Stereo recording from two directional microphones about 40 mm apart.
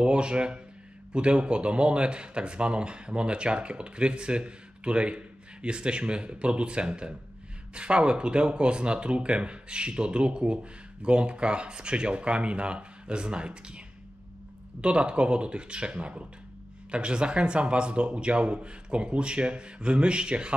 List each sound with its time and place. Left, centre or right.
0.0 s speech: right